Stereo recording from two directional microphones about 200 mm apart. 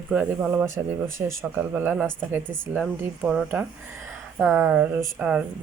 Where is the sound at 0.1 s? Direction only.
10° right (ahead or behind).